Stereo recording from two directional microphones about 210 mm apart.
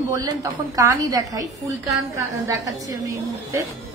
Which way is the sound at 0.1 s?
15° right (ahead or behind).